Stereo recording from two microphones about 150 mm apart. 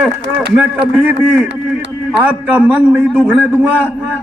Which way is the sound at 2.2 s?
10° right (ahead or behind).